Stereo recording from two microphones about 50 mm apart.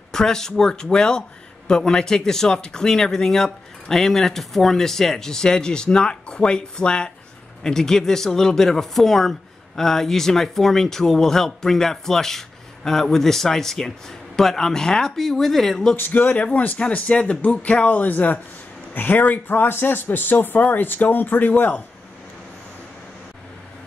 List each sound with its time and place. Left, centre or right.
0.1 s speech: centre
16.0 s speech: left